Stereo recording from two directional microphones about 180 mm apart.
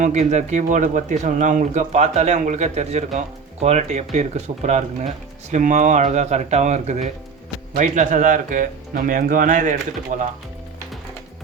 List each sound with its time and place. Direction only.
0.0 s speech: 40° right (ahead or behind)